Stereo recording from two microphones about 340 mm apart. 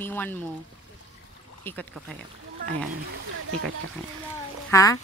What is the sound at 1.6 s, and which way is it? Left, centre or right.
Speech, centre.